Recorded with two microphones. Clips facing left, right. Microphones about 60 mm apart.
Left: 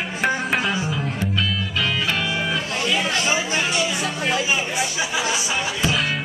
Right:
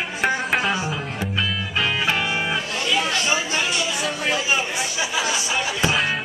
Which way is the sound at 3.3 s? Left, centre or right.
Centre.